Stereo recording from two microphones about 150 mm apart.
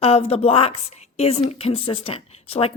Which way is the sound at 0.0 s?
40° left (ahead or behind).